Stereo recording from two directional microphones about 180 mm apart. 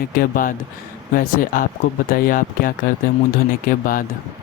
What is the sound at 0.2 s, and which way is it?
Speech, 50° left (ahead or behind).